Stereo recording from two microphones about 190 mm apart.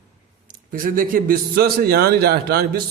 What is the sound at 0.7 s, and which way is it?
A man's voice, 45° right (ahead or behind).